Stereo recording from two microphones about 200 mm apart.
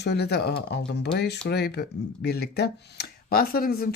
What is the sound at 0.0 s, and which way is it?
Speech, 55° left (ahead or behind).